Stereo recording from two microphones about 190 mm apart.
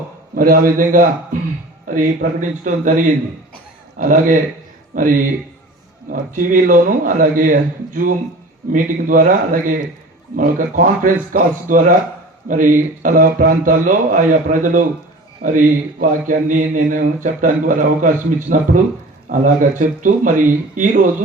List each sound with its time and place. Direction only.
0.3 s speech: 50° right (ahead or behind)